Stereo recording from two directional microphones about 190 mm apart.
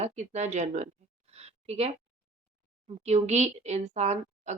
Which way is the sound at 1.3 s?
35° right (ahead or behind).